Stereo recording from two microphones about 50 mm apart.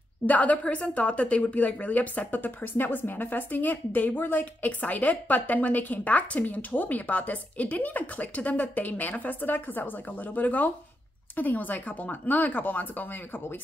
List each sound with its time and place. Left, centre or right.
0.3 s a woman's voice: left